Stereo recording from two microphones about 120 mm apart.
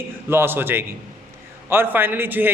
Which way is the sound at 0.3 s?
20° right (ahead or behind).